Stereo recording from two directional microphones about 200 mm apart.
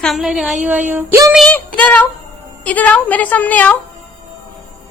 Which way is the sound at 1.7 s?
5° left (ahead or behind).